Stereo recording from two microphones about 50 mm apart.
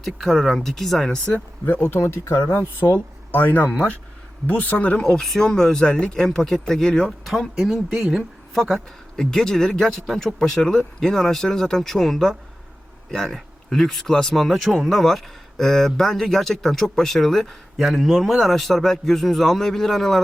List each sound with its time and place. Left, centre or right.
0.0 s a man's voice: centre
1.8 s speech: left
6.2 s speech: centre
7.5 s a man's voice: centre
9.1 s a man's voice: centre